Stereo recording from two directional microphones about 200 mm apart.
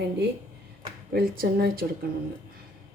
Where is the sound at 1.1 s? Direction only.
50° right (ahead or behind).